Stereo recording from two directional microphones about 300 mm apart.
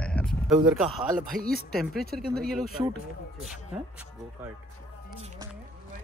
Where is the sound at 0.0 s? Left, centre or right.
Centre.